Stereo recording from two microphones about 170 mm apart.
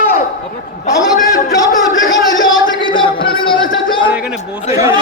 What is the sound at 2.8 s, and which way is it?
Music, 30° left (ahead or behind).